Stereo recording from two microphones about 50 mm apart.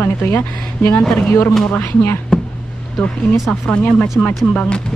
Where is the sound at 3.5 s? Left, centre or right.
Left.